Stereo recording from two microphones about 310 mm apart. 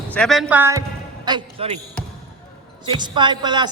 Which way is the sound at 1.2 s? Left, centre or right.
Centre.